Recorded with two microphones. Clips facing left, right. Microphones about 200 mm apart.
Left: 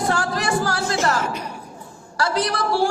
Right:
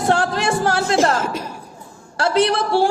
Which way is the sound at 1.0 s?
25° right (ahead or behind).